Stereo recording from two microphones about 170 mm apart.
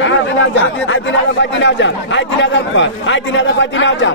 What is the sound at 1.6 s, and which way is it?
Speech, 90° left.